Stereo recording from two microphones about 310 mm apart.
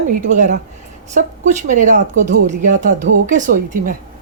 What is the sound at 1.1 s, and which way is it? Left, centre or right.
Speech, right.